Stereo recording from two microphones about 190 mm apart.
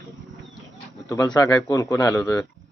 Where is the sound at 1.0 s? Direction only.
20° left (ahead or behind).